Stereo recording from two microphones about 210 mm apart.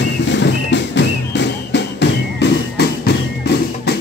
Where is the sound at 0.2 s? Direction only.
55° left (ahead or behind).